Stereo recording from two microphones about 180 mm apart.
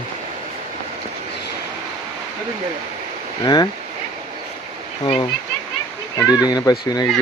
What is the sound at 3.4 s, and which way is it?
Speech, 25° left (ahead or behind).